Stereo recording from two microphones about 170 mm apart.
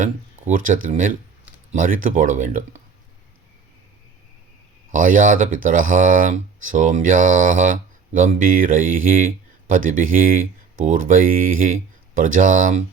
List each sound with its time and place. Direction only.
0.0 s speech: 50° right (ahead or behind)
4.9 s speech: 50° right (ahead or behind)